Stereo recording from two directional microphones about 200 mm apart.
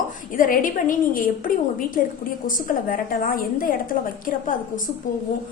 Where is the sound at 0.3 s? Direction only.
45° left (ahead or behind).